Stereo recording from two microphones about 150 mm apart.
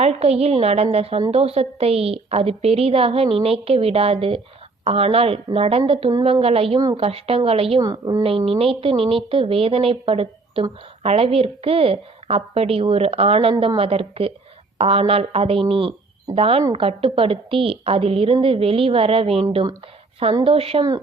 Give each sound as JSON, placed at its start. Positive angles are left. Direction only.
{"t": 0.0, "sound": "a woman's voice", "side_deg": -45}
{"t": 7.8, "sound": "a woman's voice", "side_deg": -25}
{"t": 8.2, "sound": "a woman's voice", "side_deg": -40}